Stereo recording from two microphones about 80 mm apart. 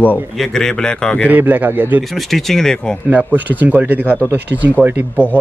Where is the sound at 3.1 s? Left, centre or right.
Right.